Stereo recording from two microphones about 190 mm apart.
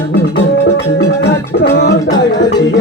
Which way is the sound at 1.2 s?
55° left (ahead or behind).